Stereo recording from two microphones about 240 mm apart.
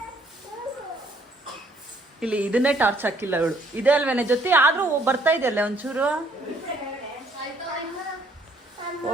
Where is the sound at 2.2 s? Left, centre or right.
Centre.